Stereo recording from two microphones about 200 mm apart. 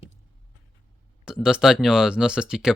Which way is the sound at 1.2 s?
5° right (ahead or behind).